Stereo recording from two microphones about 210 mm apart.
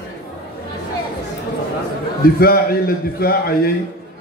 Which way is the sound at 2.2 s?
45° left (ahead or behind).